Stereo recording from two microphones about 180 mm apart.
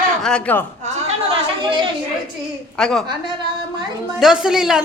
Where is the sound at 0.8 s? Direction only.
35° right (ahead or behind).